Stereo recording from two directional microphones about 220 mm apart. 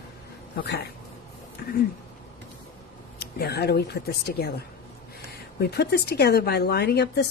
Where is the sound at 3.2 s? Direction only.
45° left (ahead or behind).